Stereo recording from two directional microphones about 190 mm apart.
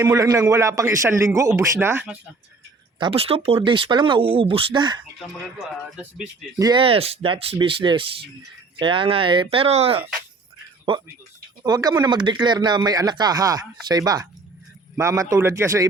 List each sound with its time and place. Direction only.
0.2 s a man's voice: 20° right (ahead or behind)
3.0 s speech: 30° right (ahead or behind)
5.5 s speech: 5° right (ahead or behind)
6.6 s speech: 25° right (ahead or behind)
11.6 s a man's voice: 20° right (ahead or behind)